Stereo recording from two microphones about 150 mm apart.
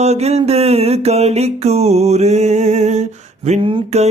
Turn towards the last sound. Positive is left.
turn(degrees=-40)  # may be behind; listen again after turning